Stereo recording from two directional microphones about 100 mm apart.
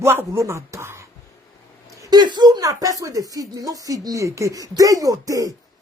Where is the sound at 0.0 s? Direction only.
25° right (ahead or behind).